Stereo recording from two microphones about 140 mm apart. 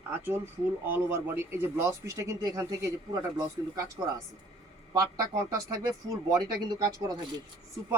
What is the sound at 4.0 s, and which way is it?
Speech, 25° right (ahead or behind).